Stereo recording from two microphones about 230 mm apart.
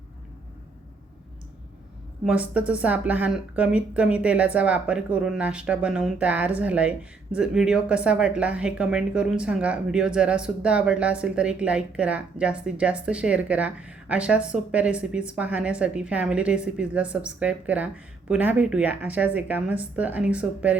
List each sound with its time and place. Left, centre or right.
2.2 s speech: centre